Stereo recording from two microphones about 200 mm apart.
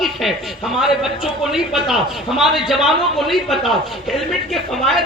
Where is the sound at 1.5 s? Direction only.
Centre (ahead or behind).